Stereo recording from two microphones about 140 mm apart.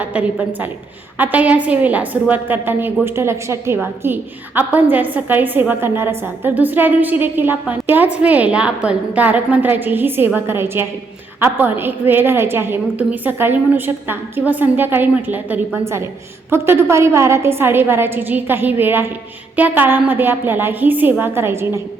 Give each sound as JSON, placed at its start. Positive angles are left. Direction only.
{"t": 0.0, "sound": "a woman's voice", "side_deg": -10}